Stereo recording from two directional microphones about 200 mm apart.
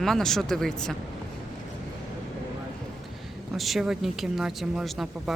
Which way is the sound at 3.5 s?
Centre (ahead or behind).